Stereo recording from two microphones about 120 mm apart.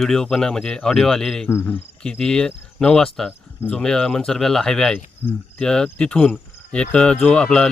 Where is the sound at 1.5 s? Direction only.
20° left (ahead or behind).